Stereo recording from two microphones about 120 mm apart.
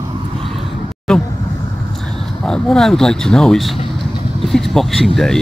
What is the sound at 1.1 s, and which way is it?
Speech, 5° left (ahead or behind).